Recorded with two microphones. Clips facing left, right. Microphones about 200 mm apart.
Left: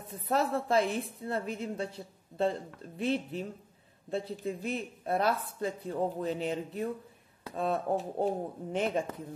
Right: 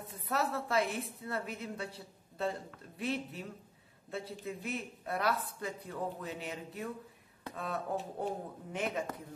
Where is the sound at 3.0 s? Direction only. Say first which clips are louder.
Left 6 dB; 30° left (ahead or behind).